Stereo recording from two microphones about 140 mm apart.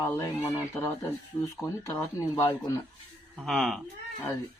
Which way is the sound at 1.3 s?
30° left (ahead or behind).